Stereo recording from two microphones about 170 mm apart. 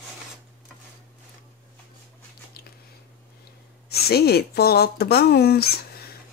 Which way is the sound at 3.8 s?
65° left (ahead or behind).